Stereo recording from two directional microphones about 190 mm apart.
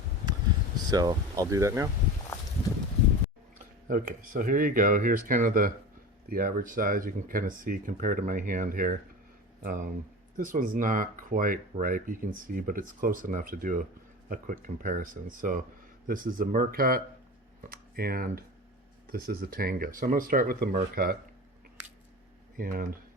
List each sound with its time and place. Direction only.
0.9 s speech: 20° right (ahead or behind)
3.8 s speech: 45° right (ahead or behind)
22.5 s speech: 45° right (ahead or behind)